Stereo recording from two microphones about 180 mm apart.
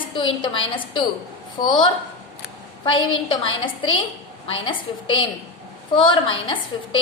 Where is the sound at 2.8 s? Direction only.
30° left (ahead or behind).